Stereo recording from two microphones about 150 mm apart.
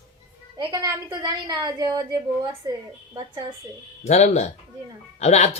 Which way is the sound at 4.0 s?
50° left (ahead or behind).